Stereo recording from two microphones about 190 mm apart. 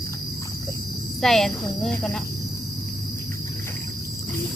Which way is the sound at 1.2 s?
Centre (ahead or behind).